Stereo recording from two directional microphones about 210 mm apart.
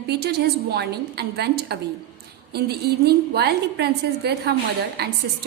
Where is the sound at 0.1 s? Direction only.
50° right (ahead or behind).